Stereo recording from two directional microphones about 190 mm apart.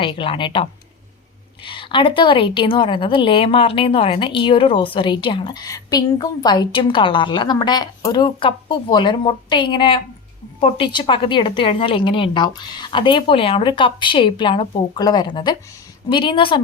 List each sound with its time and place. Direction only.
0.0 s a woman's voice: 25° left (ahead or behind)